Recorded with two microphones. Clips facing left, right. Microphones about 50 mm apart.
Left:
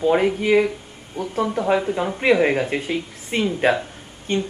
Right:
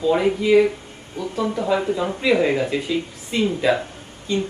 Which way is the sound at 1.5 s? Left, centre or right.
Left.